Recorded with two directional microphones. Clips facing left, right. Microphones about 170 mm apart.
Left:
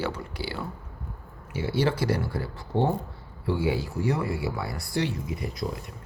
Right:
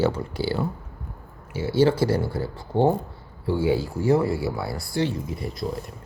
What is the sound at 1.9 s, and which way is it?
Speech, 30° right (ahead or behind).